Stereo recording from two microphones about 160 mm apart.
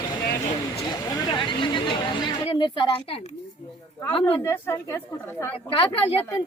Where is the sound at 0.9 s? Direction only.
30° left (ahead or behind).